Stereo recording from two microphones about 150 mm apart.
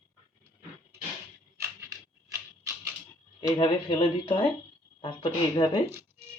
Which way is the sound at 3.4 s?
30° left (ahead or behind).